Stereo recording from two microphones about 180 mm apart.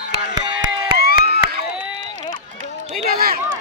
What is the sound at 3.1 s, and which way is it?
Speech, 55° right (ahead or behind).